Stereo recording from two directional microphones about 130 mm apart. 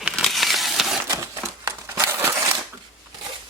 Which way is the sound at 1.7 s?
20° right (ahead or behind).